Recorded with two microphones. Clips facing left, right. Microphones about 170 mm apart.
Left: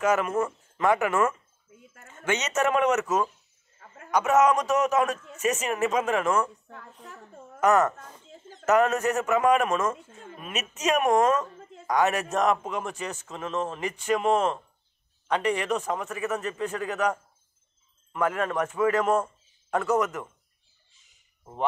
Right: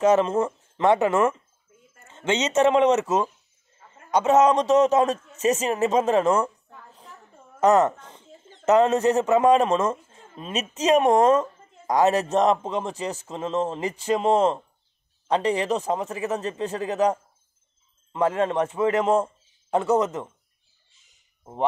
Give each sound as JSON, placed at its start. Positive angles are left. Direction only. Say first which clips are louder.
{"t": 0.0, "sound": "speech", "louder": "right 5 dB", "side_deg": -30}
{"t": 7.6, "sound": "a man's voice", "louder": "right 3 dB", "side_deg": -30}